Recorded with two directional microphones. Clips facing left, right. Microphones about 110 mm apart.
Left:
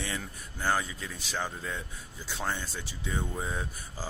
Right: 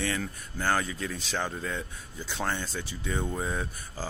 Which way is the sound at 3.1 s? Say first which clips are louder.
Right 3 dB; 20° right (ahead or behind).